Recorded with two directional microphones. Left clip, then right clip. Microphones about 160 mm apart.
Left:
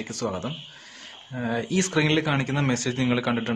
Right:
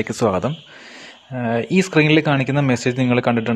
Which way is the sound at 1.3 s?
40° right (ahead or behind).